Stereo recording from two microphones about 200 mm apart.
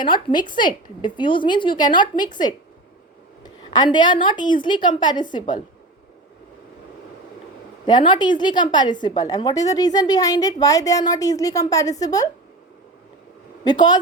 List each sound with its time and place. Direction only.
0.0 s a woman's voice: 25° left (ahead or behind)
3.4 s a woman's voice: 20° left (ahead or behind)
7.9 s a woman's voice: 25° left (ahead or behind)
13.7 s a woman's voice: 20° left (ahead or behind)